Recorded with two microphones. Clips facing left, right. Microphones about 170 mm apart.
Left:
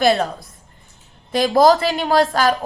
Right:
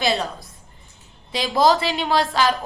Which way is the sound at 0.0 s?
50° left (ahead or behind).